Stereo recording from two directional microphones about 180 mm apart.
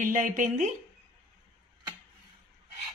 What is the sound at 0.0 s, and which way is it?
Speech, 45° right (ahead or behind).